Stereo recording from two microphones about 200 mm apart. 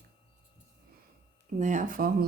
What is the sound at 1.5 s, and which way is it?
Speech, 40° right (ahead or behind).